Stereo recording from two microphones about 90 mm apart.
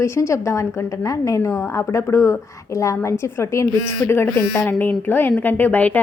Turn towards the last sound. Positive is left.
turn(degrees=20)  # may be behind; listen again after turning